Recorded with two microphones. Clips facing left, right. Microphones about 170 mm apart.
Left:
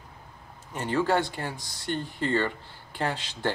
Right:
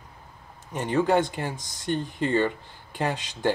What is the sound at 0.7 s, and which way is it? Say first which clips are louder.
Speech: right 3 dB; 15° right (ahead or behind).